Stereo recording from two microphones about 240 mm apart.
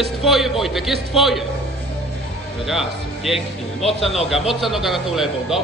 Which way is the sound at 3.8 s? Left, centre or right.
Left.